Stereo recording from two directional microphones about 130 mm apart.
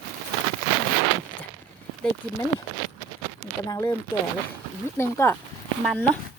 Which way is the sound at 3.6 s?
25° left (ahead or behind).